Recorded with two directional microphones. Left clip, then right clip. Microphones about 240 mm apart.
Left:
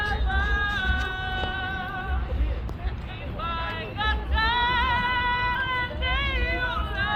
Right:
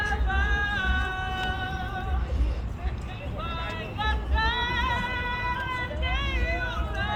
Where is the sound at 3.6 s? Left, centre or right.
Centre.